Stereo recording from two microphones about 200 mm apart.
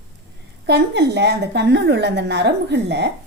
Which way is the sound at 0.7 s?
55° right (ahead or behind).